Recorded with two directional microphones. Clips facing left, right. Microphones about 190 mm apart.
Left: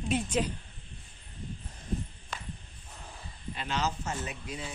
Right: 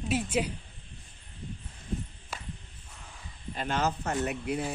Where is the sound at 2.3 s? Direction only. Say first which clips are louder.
Even; 5° right (ahead or behind).